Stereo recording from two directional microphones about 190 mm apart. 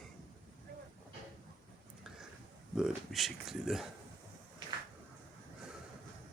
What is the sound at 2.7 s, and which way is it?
Speech, centre (ahead or behind).